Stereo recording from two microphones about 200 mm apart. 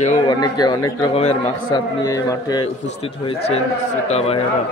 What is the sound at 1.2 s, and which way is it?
Speech, 30° left (ahead or behind).